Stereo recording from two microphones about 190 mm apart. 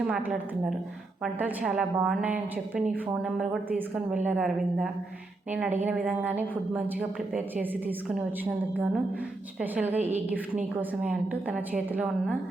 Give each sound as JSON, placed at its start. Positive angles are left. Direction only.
{"t": 0.1, "sound": "a woman's voice", "side_deg": -5}